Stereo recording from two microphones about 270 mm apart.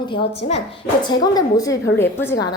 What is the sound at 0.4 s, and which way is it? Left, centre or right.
A woman's voice, left.